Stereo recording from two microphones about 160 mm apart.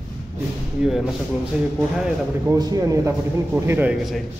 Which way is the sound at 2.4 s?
25° right (ahead or behind).